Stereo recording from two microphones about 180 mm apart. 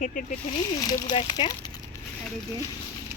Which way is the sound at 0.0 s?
45° left (ahead or behind).